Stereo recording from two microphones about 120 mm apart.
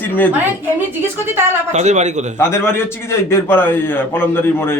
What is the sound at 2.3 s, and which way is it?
A man's voice, 20° left (ahead or behind).